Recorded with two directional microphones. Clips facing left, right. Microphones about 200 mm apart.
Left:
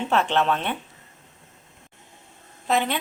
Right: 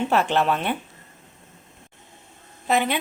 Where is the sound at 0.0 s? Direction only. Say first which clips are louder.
Right 1 dB; 10° right (ahead or behind).